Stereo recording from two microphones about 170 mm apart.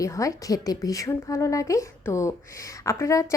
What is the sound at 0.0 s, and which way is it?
A woman's voice, 20° left (ahead or behind).